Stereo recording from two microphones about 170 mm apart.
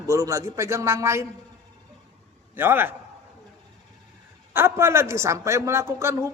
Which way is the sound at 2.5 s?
10° right (ahead or behind).